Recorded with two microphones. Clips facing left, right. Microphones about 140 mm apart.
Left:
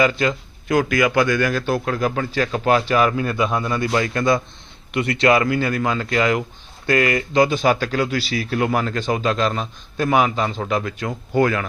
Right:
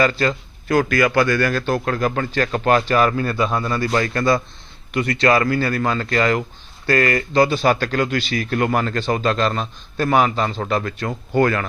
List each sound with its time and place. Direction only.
0.0 s a man's voice: 15° left (ahead or behind)